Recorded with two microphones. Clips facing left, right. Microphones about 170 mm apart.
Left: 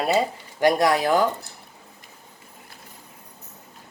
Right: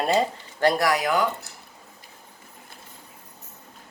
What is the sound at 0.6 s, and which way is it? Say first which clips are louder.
Speech: left 2 dB; 15° left (ahead or behind).